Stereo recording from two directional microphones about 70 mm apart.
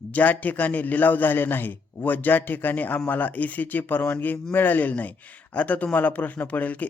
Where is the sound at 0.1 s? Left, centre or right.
Left.